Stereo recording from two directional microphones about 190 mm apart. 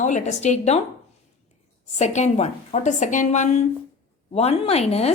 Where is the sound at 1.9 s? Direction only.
35° left (ahead or behind).